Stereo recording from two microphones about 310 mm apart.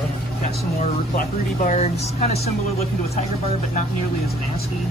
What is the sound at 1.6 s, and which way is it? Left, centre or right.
Speech, left.